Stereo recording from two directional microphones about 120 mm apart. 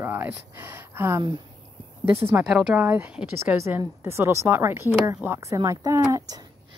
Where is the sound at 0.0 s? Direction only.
20° right (ahead or behind).